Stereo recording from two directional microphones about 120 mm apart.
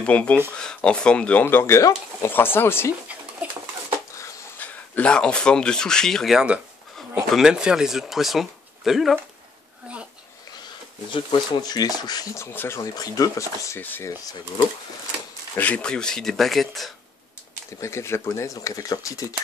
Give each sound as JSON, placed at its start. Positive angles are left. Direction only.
{"t": 0.0, "sound": "speech", "side_deg": 10}
{"t": 3.1, "sound": "bird", "side_deg": -10}
{"t": 4.6, "sound": "speech", "side_deg": 10}
{"t": 11.1, "sound": "speech", "side_deg": 40}
{"t": 15.5, "sound": "speech", "side_deg": 10}
{"t": 17.7, "sound": "speech", "side_deg": 25}